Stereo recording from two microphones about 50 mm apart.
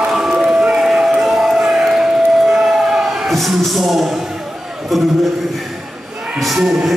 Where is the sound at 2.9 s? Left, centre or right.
Centre.